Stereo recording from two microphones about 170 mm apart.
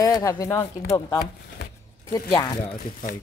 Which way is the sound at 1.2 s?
60° left (ahead or behind).